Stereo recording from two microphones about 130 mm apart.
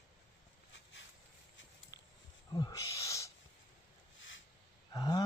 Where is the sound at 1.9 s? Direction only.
30° left (ahead or behind).